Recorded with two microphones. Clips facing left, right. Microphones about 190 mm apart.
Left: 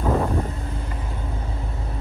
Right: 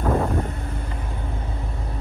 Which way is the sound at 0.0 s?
Centre (ahead or behind).